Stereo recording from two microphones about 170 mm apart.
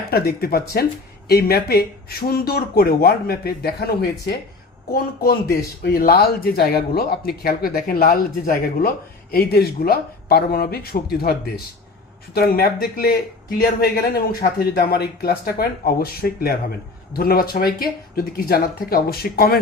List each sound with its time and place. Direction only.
0.1 s speech: 65° left (ahead or behind)